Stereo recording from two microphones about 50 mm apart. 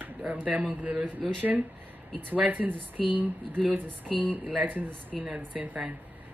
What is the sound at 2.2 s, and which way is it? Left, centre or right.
Speech, right.